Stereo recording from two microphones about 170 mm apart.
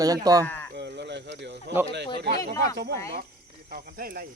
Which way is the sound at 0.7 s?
85° right.